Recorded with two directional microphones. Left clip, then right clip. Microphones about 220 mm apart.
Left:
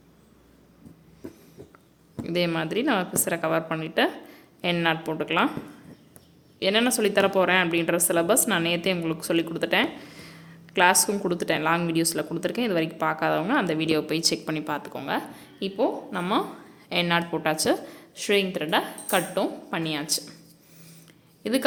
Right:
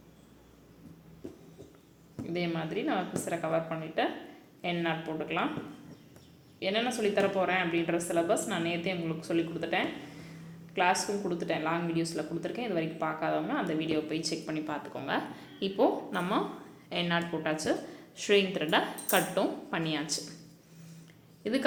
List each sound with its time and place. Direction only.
2.2 s speech: 45° left (ahead or behind)
6.6 s a woman's voice: 45° left (ahead or behind); by 20.2 s 20° left (ahead or behind)
21.4 s a woman's voice: 25° left (ahead or behind)